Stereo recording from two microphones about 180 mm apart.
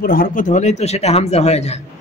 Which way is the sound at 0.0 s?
50° left (ahead or behind).